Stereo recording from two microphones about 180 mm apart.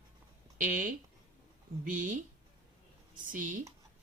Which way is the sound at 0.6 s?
45° right (ahead or behind).